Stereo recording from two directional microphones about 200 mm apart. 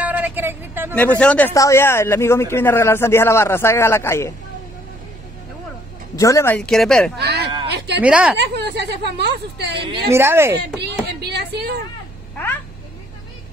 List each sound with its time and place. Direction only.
0.0 s vehicle: 10° right (ahead or behind)
0.9 s speech: 5° left (ahead or behind)
6.1 s speech: 15° left (ahead or behind)
7.2 s speech: 55° right (ahead or behind)
7.7 s a sound: 60° right (ahead or behind)
8.0 s a woman's voice: 5° right (ahead or behind)
8.4 s a woman's voice: 60° right (ahead or behind)
9.8 s a woman's voice: 15° right (ahead or behind)
10.5 s a woman's voice: 60° right (ahead or behind)